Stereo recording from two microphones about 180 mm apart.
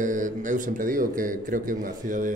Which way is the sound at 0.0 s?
45° right (ahead or behind).